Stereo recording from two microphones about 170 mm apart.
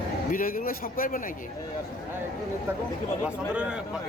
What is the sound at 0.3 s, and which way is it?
Speech, 55° left (ahead or behind).